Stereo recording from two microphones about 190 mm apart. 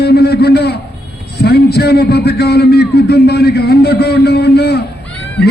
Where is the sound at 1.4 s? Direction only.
60° left (ahead or behind).